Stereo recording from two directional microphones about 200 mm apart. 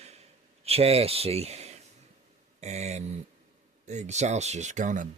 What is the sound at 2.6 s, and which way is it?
Speech, 35° right (ahead or behind).